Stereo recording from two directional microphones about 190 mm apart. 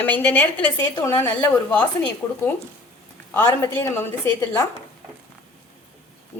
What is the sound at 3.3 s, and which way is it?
Speech, 10° left (ahead or behind).